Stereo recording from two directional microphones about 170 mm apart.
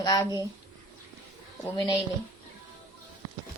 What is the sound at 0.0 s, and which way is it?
Speech, 20° left (ahead or behind).